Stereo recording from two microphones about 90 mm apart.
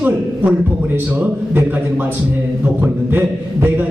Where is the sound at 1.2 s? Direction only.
20° right (ahead or behind).